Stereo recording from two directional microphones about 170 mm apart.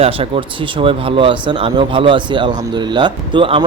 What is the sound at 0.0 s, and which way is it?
Speech, 30° right (ahead or behind).